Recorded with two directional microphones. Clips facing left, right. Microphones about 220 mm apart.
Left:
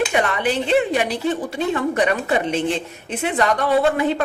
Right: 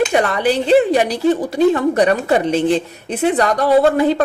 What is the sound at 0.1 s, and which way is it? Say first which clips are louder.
Speech: right 4 dB; 35° right (ahead or behind).